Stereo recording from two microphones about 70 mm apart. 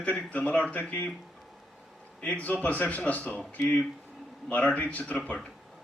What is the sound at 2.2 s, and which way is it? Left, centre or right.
A man's voice, centre.